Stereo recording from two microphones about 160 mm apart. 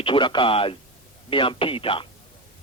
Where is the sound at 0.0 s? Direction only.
30° left (ahead or behind).